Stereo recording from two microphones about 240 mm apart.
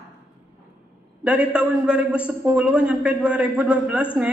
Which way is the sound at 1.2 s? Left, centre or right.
Centre.